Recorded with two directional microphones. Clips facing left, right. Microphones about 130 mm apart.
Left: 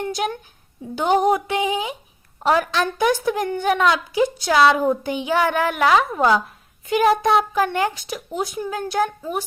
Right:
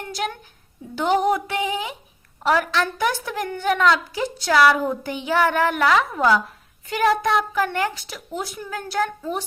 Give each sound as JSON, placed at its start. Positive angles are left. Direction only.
{"t": 0.0, "sound": "a woman's voice", "side_deg": 20}